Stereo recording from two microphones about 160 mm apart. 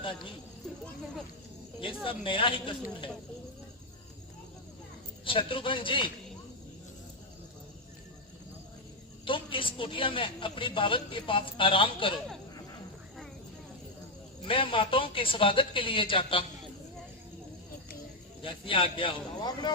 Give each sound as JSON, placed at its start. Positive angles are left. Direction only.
{"t": 0.0, "sound": "speech", "side_deg": 30}
{"t": 2.0, "sound": "a woman's voice", "side_deg": 35}
{"t": 5.2, "sound": "a woman's voice", "side_deg": 35}
{"t": 9.2, "sound": "a woman's voice", "side_deg": 30}
{"t": 14.4, "sound": "a woman's voice", "side_deg": 35}
{"t": 18.4, "sound": "a woman's voice", "side_deg": 30}